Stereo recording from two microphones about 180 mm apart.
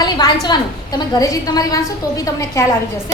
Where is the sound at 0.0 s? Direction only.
20° left (ahead or behind).